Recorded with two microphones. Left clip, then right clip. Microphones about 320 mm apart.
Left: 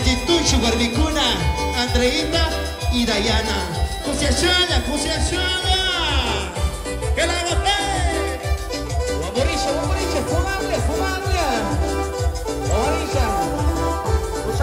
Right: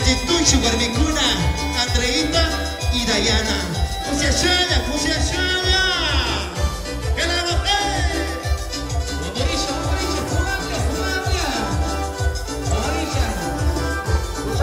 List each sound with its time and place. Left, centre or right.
0.0 s music: centre
9.4 s music: centre
12.7 s music: centre